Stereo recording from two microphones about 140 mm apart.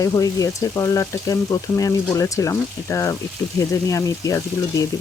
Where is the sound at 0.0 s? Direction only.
25° left (ahead or behind).